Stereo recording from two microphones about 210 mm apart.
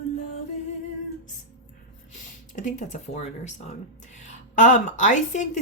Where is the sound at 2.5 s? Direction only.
35° left (ahead or behind).